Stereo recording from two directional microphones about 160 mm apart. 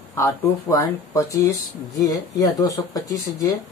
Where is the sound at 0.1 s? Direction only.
20° left (ahead or behind).